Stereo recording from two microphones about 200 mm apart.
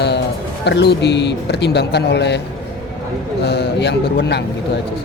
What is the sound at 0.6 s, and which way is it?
Speech, 55° left (ahead or behind).